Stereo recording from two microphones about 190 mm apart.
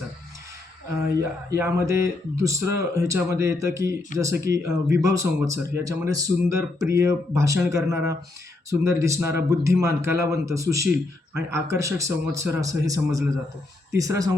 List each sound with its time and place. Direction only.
1.2 s speech: 15° right (ahead or behind)